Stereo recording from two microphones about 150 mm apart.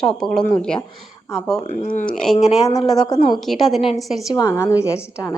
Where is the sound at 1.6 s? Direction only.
50° left (ahead or behind).